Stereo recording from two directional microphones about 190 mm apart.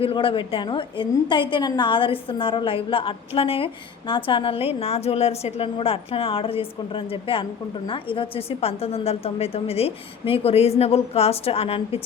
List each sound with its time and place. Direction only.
0.0 s a woman's voice: 30° left (ahead or behind)